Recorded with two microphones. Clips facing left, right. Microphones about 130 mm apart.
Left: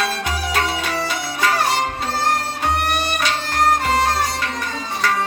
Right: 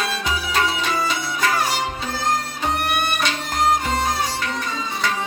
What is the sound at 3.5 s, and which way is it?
Music, 70° left (ahead or behind).